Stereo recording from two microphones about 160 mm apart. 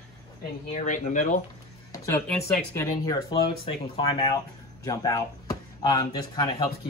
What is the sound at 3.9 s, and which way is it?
Speech, 35° left (ahead or behind).